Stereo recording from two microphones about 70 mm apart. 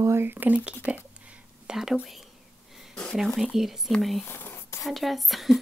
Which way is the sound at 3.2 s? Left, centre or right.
Centre.